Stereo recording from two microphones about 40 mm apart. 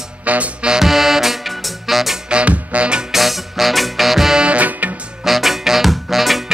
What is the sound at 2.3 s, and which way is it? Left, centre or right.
Music, right.